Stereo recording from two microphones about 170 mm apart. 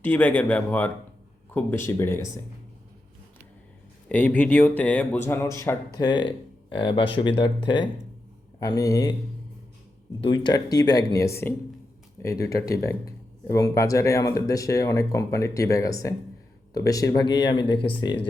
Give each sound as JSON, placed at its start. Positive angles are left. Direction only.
{"t": 0.0, "sound": "speech", "side_deg": 10}
{"t": 4.1, "sound": "speech", "side_deg": 10}
{"t": 10.2, "sound": "speech", "side_deg": 30}